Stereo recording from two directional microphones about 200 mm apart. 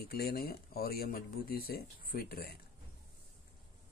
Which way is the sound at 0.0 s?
50° left (ahead or behind).